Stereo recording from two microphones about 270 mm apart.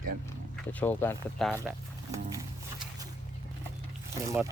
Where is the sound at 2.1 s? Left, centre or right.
Centre.